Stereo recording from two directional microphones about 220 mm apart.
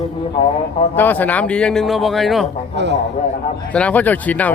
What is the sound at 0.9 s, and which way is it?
A man's voice, 10° left (ahead or behind).